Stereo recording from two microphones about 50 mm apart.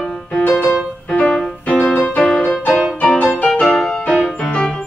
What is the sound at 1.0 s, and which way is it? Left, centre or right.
Music, centre.